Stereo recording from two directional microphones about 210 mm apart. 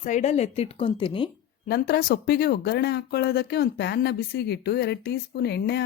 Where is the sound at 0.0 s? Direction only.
35° left (ahead or behind).